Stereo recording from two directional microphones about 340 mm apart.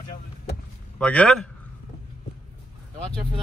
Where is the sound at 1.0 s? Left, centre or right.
Centre.